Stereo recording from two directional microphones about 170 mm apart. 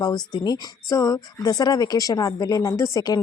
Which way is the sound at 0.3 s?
25° left (ahead or behind).